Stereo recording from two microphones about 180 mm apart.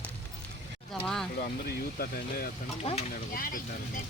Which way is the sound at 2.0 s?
55° left (ahead or behind).